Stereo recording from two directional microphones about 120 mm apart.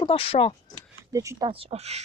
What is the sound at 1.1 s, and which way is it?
Speech, 30° right (ahead or behind).